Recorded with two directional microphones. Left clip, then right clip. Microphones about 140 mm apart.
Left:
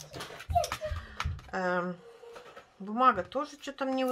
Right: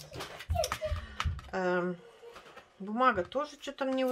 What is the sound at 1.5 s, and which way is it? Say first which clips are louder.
Speech: even; centre (ahead or behind).